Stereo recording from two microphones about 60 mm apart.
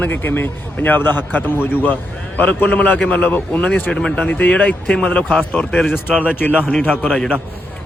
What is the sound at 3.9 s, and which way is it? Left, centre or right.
A man's voice, centre.